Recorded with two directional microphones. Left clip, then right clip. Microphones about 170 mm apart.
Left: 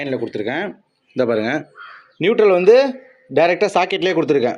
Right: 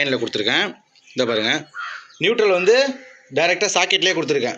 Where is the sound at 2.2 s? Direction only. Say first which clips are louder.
Left 3 dB; 60° left (ahead or behind).